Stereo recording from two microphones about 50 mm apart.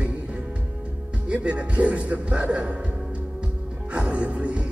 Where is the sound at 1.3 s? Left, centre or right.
Right.